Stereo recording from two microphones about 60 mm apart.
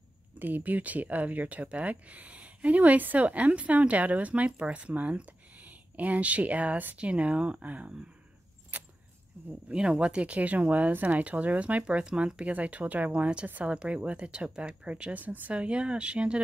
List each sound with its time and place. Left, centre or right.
0.4 s speech: right
9.7 s speech: centre